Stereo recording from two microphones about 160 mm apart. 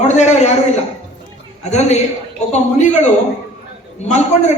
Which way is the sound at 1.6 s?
45° left (ahead or behind).